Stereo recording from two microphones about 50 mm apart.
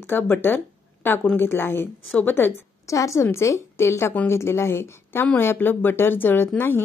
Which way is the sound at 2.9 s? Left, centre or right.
Left.